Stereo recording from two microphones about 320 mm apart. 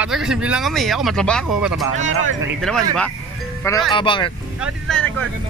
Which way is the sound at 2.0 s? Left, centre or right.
Right.